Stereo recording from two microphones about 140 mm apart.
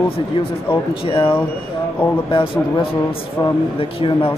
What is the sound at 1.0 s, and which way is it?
Speech, 40° left (ahead or behind).